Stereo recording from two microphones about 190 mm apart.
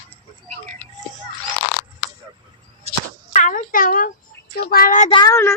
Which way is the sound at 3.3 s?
40° left (ahead or behind).